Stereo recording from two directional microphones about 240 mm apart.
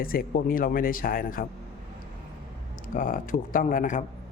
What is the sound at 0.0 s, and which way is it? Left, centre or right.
A man's voice, left.